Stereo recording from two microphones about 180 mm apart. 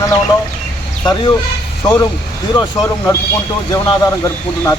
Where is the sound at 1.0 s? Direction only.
25° left (ahead or behind).